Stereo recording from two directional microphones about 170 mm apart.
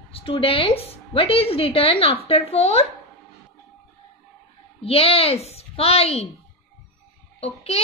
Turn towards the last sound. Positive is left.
turn(degrees=40)  # may be behind; listen again after turning